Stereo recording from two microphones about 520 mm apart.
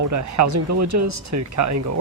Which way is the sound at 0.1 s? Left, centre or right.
Right.